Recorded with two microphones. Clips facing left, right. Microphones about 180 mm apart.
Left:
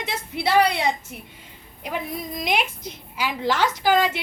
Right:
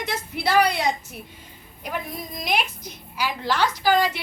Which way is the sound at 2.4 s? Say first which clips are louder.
Left 1 dB; 25° left (ahead or behind).